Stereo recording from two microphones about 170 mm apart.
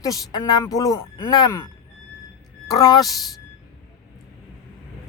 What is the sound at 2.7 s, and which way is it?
Speech, 20° left (ahead or behind).